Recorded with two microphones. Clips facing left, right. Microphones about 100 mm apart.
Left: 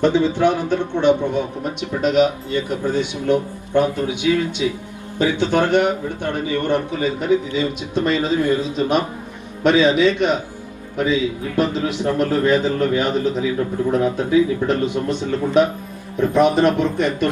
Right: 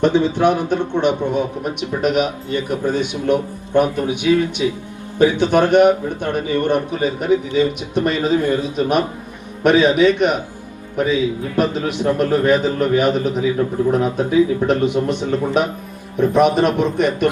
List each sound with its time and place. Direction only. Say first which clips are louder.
0.0 s a man's voice: right 1 dB; 15° right (ahead or behind)